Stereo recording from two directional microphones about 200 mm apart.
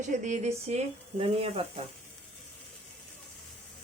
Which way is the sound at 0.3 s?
35° right (ahead or behind).